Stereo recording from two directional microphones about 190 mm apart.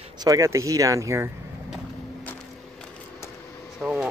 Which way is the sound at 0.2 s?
15° right (ahead or behind).